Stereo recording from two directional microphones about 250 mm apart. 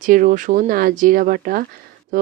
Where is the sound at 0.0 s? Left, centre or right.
Right.